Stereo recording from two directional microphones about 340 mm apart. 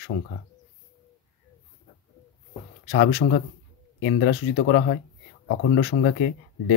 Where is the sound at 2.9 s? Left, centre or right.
Left.